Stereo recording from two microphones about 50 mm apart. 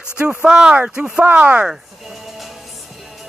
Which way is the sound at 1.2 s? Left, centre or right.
Right.